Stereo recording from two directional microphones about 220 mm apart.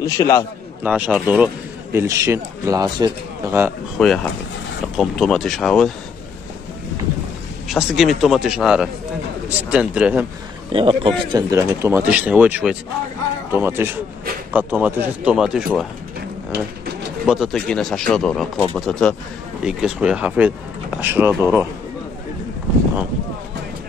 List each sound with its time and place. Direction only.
0.0 s a man's voice: 15° left (ahead or behind)
0.8 s a man's voice: 5° right (ahead or behind)
4.0 s speech: centre (ahead or behind)
7.6 s speech: centre (ahead or behind)
10.7 s a man's voice: 25° right (ahead or behind)
11.5 s a man's voice: 10° right (ahead or behind)
17.3 s a man's voice: centre (ahead or behind)